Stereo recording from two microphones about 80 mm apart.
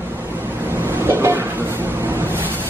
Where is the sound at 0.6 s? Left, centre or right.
Right.